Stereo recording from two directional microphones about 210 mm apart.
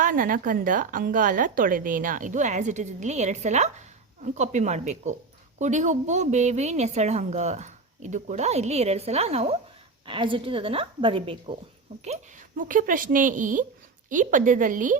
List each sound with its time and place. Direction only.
0.0 s a woman's voice: 40° right (ahead or behind); by 11.5 s 25° right (ahead or behind)
12.0 s a woman's voice: 35° right (ahead or behind)